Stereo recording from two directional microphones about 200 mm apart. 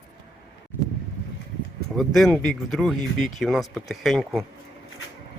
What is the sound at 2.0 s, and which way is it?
Speech, centre (ahead or behind).